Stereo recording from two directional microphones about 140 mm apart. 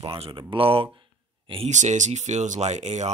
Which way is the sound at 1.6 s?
60° right (ahead or behind).